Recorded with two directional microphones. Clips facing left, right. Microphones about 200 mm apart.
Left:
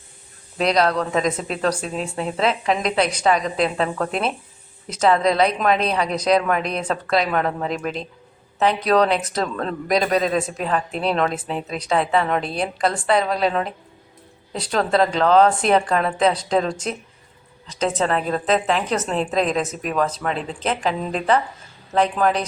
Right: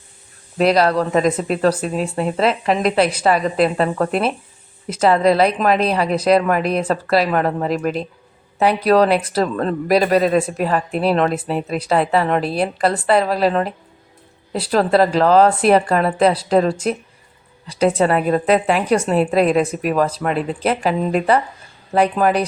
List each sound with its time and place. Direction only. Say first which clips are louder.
0.6 s a woman's voice: right 4 dB; 5° right (ahead or behind)